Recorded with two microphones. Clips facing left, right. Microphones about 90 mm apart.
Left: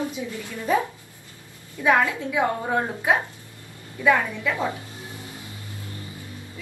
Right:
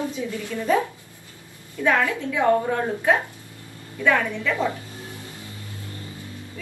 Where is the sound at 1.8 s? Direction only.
15° left (ahead or behind).